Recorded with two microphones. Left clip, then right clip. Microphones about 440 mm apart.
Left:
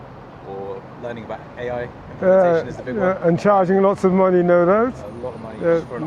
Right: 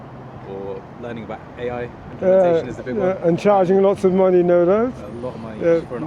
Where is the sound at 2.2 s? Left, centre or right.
Centre.